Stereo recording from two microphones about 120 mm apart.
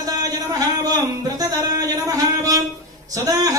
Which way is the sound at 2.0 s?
30° right (ahead or behind).